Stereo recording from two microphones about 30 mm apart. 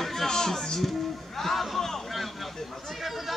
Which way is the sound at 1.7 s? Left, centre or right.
Centre.